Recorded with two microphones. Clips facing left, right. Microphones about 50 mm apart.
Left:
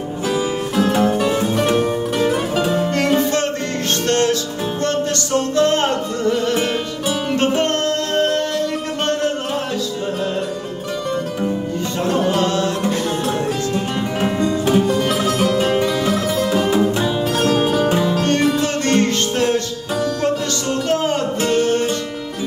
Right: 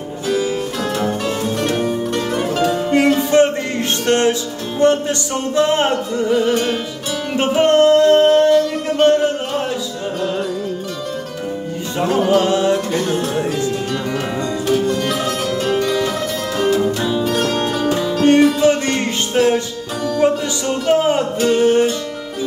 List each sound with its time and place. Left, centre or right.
0.3 s music: centre
3.2 s music: centre
12.0 s music: centre
12.4 s music: centre
14.2 s music: left
14.9 s music: centre
18.2 s music: centre